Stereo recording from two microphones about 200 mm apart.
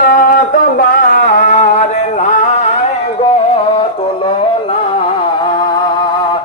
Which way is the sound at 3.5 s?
25° left (ahead or behind).